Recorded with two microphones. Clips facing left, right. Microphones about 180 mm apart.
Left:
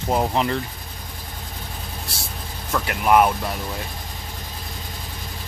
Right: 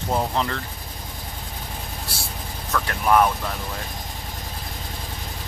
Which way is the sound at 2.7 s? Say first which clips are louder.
Left 2 dB; 15° left (ahead or behind).